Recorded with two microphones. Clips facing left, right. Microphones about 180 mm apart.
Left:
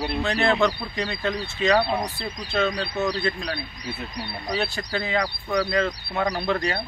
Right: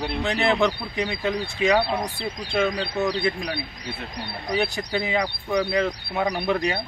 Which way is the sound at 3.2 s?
15° right (ahead or behind).